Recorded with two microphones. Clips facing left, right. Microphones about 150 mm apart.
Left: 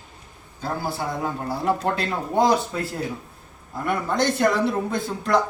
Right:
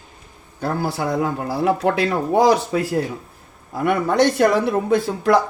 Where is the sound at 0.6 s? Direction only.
75° right (ahead or behind).